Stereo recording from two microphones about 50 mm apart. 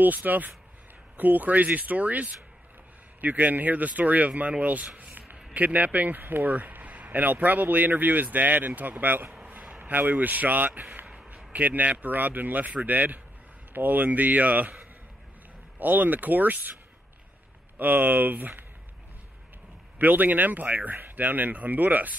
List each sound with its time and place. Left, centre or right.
0.0 s speech: right
4.9 s a sound: right
5.5 s speech: right
15.8 s speech: right
17.7 s speech: right
20.0 s speech: right